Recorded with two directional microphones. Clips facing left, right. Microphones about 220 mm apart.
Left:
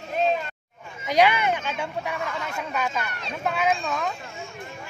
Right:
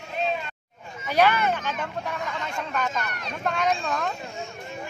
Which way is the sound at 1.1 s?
15° left (ahead or behind).